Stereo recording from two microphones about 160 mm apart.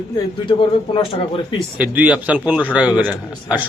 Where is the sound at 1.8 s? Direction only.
5° right (ahead or behind).